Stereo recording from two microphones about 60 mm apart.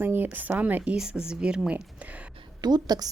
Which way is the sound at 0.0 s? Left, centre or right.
Right.